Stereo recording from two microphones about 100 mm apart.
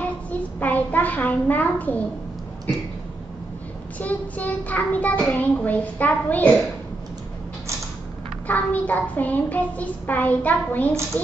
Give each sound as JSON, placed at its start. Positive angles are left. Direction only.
{"t": 0.0, "sound": "child singing", "side_deg": 15}
{"t": 4.0, "sound": "child singing", "side_deg": 15}
{"t": 8.5, "sound": "child singing", "side_deg": 15}